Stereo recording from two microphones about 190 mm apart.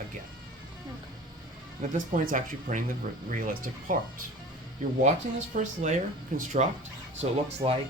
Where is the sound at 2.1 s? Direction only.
40° right (ahead or behind).